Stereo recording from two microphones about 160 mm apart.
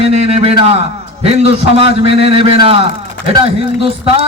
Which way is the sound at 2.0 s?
40° right (ahead or behind).